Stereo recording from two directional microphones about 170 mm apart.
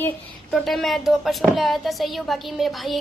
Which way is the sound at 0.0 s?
5° left (ahead or behind).